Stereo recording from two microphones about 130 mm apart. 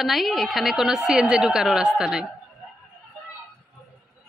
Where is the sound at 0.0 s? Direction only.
Centre (ahead or behind).